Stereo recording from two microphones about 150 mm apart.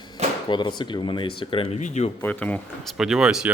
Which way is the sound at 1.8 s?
50° left (ahead or behind).